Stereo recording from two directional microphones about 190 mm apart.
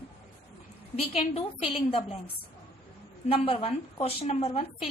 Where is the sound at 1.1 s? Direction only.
30° left (ahead or behind).